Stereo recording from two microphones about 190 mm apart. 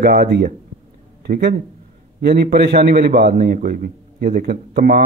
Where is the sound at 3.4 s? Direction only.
45° right (ahead or behind).